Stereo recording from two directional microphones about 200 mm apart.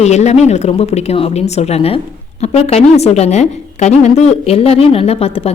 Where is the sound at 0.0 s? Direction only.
35° left (ahead or behind).